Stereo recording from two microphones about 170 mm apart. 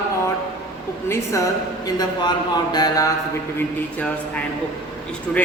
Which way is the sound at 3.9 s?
10° left (ahead or behind).